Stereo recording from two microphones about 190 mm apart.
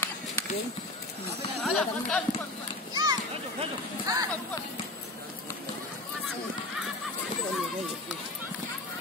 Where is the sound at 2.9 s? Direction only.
20° right (ahead or behind).